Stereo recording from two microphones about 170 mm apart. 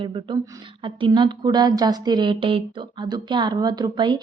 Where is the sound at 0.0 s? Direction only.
30° right (ahead or behind).